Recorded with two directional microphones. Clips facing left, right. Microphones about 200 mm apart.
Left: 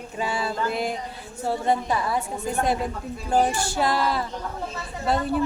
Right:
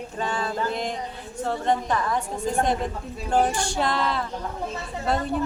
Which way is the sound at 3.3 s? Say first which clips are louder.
Even; 5° left (ahead or behind).